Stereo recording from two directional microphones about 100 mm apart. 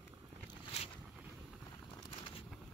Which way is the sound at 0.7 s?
90° left.